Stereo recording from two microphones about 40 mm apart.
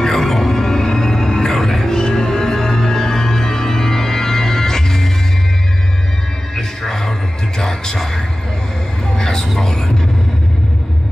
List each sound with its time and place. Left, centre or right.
0.0 s music: centre
6.5 s music: centre
9.1 s a sound: centre
9.7 s music: centre